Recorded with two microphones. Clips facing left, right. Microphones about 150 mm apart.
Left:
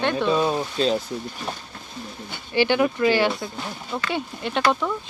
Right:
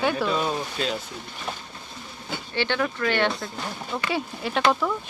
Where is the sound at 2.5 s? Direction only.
15° left (ahead or behind).